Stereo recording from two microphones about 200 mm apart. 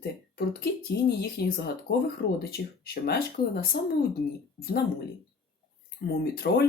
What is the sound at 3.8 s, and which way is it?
Speech, 55° left (ahead or behind).